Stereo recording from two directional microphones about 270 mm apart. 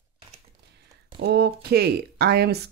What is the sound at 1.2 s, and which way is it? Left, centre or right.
Speech, right.